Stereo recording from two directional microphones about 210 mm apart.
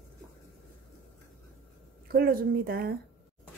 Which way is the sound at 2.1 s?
45° right (ahead or behind).